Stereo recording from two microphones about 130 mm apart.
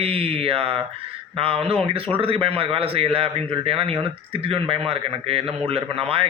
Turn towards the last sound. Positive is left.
turn(degrees=-45)  # may be behind; listen again after turning